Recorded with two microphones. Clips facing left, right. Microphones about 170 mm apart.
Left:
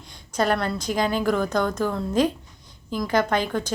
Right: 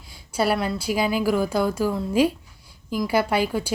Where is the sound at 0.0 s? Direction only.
5° right (ahead or behind).